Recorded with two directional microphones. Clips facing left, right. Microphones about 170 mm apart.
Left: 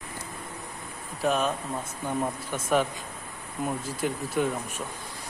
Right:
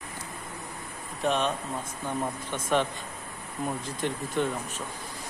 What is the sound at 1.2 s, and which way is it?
Speech, 5° left (ahead or behind).